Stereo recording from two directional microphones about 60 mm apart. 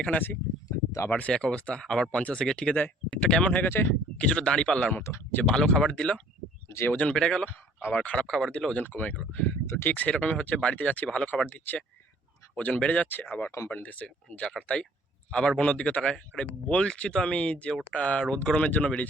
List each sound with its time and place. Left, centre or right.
0.0 s speech: left
3.7 s speech: left
4.2 s speech: centre
6.7 s speech: left
7.1 s speech: centre
7.4 s speech: left
8.0 s speech: centre
8.8 s speech: left
10.1 s speech: centre